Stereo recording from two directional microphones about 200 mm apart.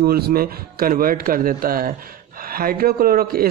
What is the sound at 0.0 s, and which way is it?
A man's voice, 50° right (ahead or behind).